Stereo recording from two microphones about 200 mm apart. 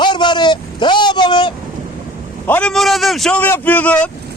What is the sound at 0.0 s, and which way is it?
Vehicle, 25° left (ahead or behind).